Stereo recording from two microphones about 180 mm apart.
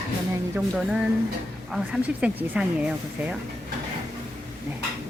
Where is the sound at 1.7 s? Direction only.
5° right (ahead or behind).